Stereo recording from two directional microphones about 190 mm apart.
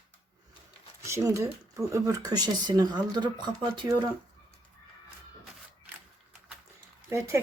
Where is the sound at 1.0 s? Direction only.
15° right (ahead or behind).